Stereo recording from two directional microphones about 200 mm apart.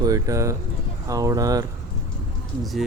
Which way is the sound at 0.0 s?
15° right (ahead or behind).